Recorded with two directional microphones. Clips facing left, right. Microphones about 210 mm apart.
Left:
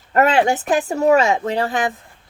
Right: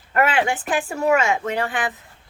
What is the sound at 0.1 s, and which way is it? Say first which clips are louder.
A woman's voice: left 5 dB; 40° left (ahead or behind).